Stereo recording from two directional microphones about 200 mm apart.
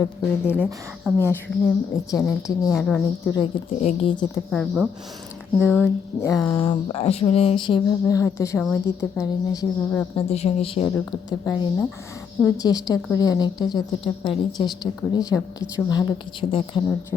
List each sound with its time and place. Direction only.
0.0 s a woman's voice: 10° left (ahead or behind)
0.6 s speech: 10° right (ahead or behind)
1.6 s a woman's voice: 15° left (ahead or behind)
2.7 s speech: 5° left (ahead or behind)
3.3 s speech: 30° left (ahead or behind)
4.5 s a woman's voice: centre (ahead or behind)
10.2 s speech: 30° left (ahead or behind)